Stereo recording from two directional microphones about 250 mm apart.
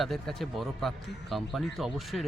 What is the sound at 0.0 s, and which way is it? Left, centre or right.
Speech, centre.